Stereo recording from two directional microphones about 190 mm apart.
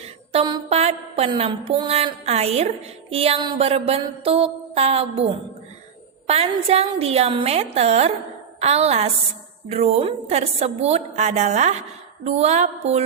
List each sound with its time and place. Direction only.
0.3 s mantra: 30° right (ahead or behind)